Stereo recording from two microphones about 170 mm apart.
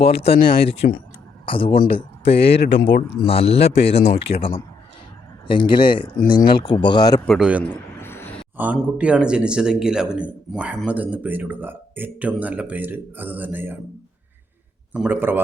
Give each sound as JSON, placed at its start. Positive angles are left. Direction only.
{"t": 0.0, "sound": "speech", "side_deg": 35}
{"t": 0.3, "sound": "speech", "side_deg": 60}
{"t": 1.5, "sound": "speech", "side_deg": 30}
{"t": 2.4, "sound": "speech", "side_deg": 75}
{"t": 3.1, "sound": "speech", "side_deg": 35}
{"t": 7.3, "sound": "a man's voice", "side_deg": -5}
{"t": 7.6, "sound": "a sound", "side_deg": 10}
{"t": 8.5, "sound": "a man's voice", "side_deg": -10}
{"t": 14.9, "sound": "speech", "side_deg": -10}